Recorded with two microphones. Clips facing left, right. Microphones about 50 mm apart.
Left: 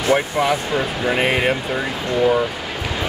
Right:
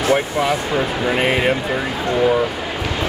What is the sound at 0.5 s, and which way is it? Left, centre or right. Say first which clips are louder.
Speech: right 1 dB; centre.